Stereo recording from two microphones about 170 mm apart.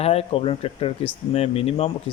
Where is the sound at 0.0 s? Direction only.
35° left (ahead or behind).